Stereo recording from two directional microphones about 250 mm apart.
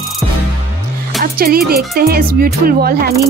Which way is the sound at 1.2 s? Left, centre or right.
Right.